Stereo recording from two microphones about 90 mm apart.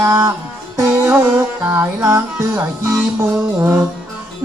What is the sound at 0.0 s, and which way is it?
Music, 30° right (ahead or behind).